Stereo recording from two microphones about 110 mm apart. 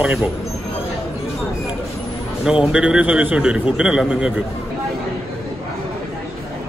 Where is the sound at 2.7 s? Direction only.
10° right (ahead or behind).